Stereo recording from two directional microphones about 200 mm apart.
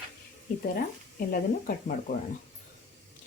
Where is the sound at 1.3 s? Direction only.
40° left (ahead or behind).